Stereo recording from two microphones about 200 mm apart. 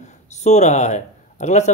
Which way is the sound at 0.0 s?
35° left (ahead or behind).